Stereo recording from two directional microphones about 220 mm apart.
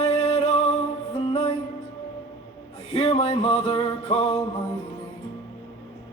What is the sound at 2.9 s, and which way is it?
Music, 30° left (ahead or behind).